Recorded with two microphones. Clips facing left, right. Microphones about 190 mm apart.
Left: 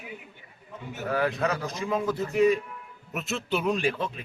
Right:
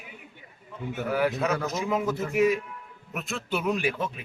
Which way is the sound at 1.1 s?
5° right (ahead or behind).